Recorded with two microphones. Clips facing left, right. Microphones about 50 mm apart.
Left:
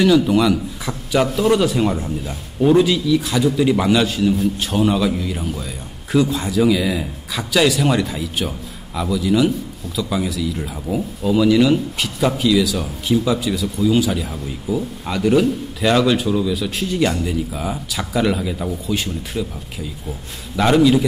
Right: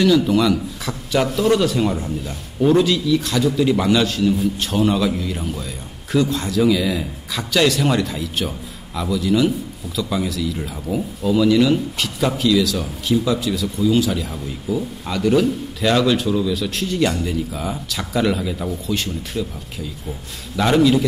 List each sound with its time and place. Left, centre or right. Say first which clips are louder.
0.0 s a man's voice: left 1 dB; centre